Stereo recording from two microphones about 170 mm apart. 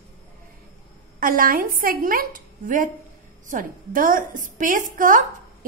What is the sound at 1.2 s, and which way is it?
A woman's voice, 55° right (ahead or behind).